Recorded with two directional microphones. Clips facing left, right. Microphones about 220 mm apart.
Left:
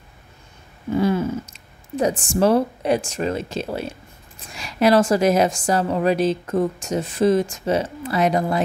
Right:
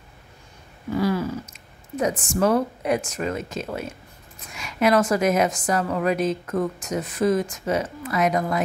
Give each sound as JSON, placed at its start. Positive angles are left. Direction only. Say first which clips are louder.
{"t": 0.9, "sound": "a woman's voice", "louder": "left 3 dB", "side_deg": 25}